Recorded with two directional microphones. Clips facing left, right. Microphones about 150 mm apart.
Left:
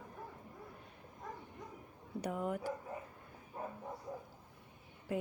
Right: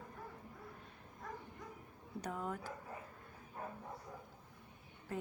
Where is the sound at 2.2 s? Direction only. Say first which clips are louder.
Left 5 dB; 15° left (ahead or behind).